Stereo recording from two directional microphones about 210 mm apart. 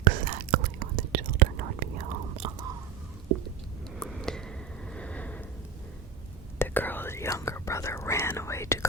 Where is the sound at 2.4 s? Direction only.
20° right (ahead or behind).